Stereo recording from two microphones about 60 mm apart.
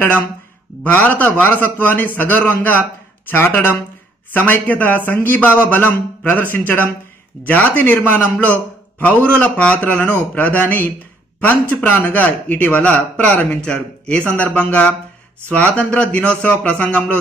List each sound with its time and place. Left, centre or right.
0.8 s speech: left
4.3 s speech: left